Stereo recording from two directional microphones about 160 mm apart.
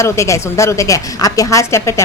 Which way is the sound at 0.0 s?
20° left (ahead or behind).